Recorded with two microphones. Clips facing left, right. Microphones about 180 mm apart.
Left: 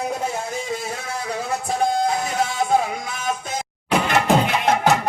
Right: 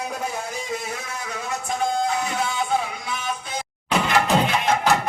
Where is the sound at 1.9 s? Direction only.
40° left (ahead or behind).